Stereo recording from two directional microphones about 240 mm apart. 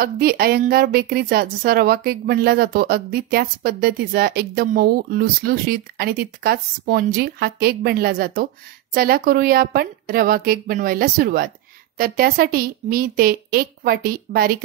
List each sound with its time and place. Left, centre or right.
0.0 s a woman's voice: right